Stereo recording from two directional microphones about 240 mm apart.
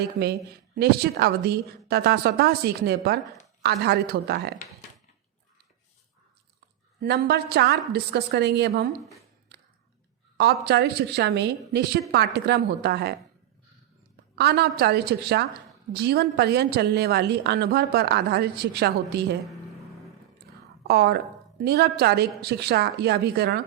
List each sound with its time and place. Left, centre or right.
0.8 s a woman's voice: right
7.0 s a woman's voice: right
10.3 s a woman's voice: right
14.3 s a woman's voice: right
20.8 s a woman's voice: right